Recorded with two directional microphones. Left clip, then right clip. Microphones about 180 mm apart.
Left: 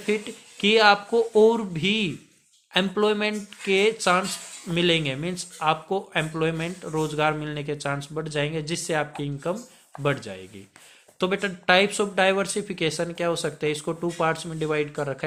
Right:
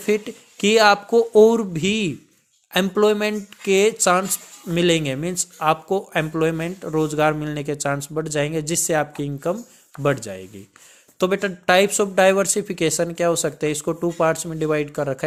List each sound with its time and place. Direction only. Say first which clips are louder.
0.0 s speech: right 5 dB; 45° right (ahead or behind)